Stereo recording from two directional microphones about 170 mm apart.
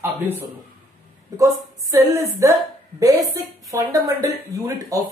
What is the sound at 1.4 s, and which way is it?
A woman's voice, 20° right (ahead or behind).